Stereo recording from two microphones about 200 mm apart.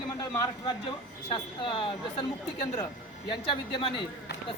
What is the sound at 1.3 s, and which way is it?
Speech, 25° left (ahead or behind).